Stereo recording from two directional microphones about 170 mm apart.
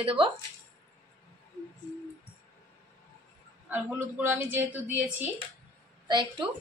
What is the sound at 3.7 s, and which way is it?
Speech, 15° right (ahead or behind).